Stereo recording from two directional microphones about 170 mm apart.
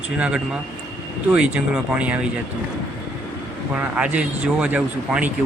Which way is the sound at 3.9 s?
5° right (ahead or behind).